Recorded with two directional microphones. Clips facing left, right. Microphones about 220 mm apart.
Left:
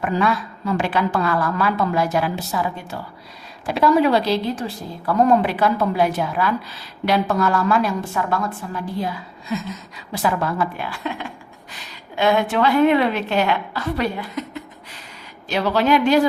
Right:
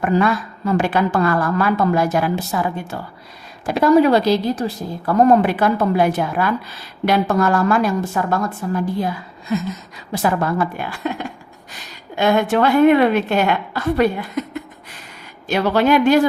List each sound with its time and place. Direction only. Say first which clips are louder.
0.0 s a woman's voice: right 3 dB; 45° right (ahead or behind)
3.7 s a woman's voice: right 3 dB; 45° right (ahead or behind)